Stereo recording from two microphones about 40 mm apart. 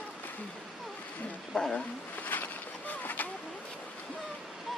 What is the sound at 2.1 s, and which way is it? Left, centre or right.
Boat, left.